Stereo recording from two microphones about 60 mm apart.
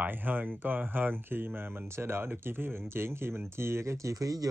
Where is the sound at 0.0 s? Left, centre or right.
Right.